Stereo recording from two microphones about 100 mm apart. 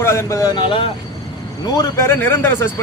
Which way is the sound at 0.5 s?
55° left (ahead or behind).